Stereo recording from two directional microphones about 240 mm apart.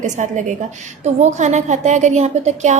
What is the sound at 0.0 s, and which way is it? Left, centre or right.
A woman's voice, right.